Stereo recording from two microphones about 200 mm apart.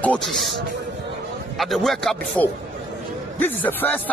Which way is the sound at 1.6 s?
Centre (ahead or behind).